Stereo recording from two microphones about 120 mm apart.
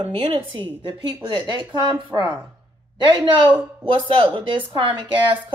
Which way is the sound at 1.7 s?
40° right (ahead or behind).